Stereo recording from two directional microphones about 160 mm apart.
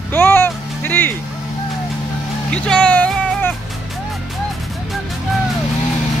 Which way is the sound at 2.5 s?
5° left (ahead or behind).